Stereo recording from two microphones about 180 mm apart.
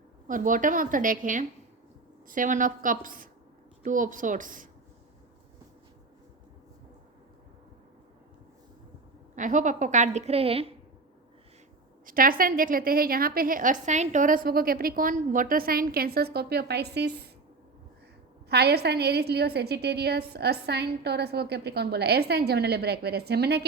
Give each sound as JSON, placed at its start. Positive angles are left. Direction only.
{"t": 0.3, "sound": "a woman's voice", "side_deg": -45}
{"t": 9.3, "sound": "a woman's voice", "side_deg": -45}
{"t": 12.0, "sound": "a woman's voice", "side_deg": -50}
{"t": 18.4, "sound": "a woman's voice", "side_deg": -65}